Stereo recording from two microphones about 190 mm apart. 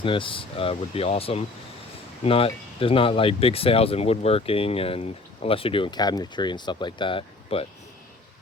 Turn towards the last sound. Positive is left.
turn(degrees=25)  # may be behind; listen again after turning